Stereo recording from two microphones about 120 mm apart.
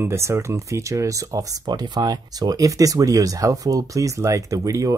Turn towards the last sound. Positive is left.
turn(degrees=-30)  # may be behind; listen again after turning